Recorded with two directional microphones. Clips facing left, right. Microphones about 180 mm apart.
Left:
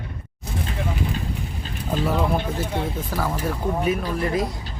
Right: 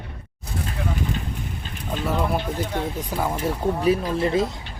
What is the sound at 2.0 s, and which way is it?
Speech, centre (ahead or behind).